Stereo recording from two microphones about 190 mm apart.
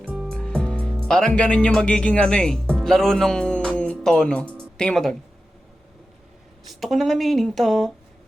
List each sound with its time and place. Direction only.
0.1 s music: centre (ahead or behind)
6.7 s speech: centre (ahead or behind)